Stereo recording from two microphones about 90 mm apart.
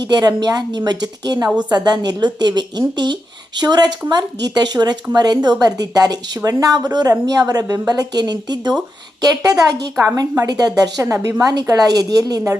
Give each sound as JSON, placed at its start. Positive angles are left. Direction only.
{"t": 0.0, "sound": "speech", "side_deg": -50}
{"t": 11.0, "sound": "a woman's voice", "side_deg": -35}
{"t": 11.7, "sound": "speech", "side_deg": -45}